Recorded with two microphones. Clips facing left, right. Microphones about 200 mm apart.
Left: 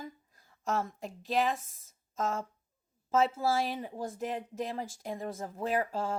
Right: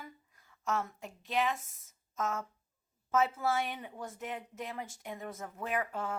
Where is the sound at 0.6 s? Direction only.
35° left (ahead or behind).